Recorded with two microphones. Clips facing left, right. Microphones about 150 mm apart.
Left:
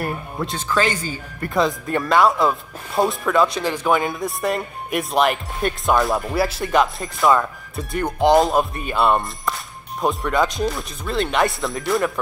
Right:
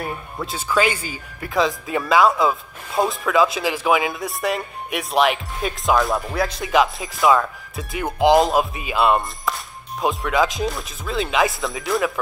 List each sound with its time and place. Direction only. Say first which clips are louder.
0.0 s speech: left 3 dB; centre (ahead or behind)
0.6 s speech: right 1 dB; 10° right (ahead or behind)
1.5 s speech: even; centre (ahead or behind)